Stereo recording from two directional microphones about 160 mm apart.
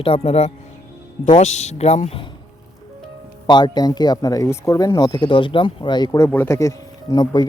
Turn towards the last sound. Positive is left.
turn(degrees=25)  # may be behind; listen again after turning